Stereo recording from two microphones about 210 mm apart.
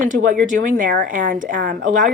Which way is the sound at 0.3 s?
40° right (ahead or behind).